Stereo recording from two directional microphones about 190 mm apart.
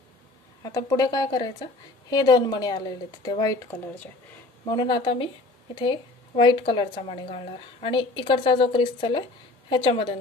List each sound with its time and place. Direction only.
0.6 s a woman's voice: 20° left (ahead or behind)